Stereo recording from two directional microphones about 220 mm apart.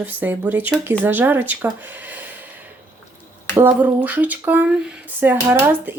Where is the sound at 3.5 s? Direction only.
10° right (ahead or behind).